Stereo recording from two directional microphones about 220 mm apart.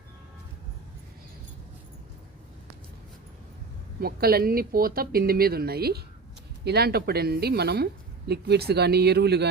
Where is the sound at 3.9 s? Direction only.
45° right (ahead or behind).